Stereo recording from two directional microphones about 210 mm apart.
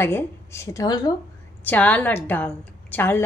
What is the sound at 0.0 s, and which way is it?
Speech, 10° left (ahead or behind).